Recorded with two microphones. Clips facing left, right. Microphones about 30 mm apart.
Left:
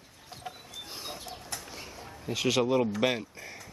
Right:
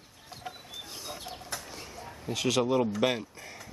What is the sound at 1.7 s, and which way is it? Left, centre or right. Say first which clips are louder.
Speech: right 1 dB; centre.